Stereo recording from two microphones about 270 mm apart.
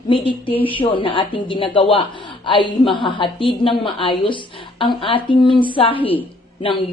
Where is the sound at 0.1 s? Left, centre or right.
Centre.